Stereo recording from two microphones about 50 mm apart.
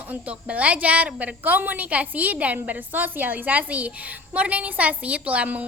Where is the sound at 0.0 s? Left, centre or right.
Right.